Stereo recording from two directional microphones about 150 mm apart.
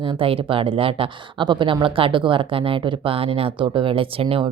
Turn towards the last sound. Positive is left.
turn(degrees=-35)  # may be behind; listen again after turning